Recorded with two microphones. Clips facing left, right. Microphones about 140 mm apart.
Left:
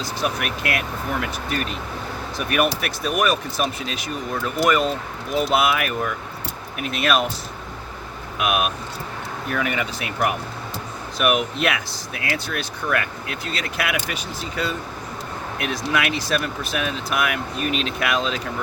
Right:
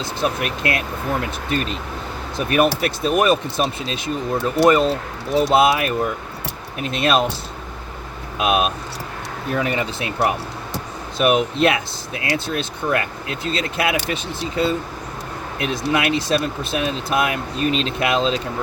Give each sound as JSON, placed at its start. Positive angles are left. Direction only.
{"t": 0.0, "sound": "speech", "side_deg": -25}
{"t": 2.4, "sound": "speech", "side_deg": -30}
{"t": 8.4, "sound": "speech", "side_deg": -30}